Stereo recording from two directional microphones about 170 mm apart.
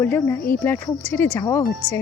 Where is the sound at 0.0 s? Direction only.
10° left (ahead or behind).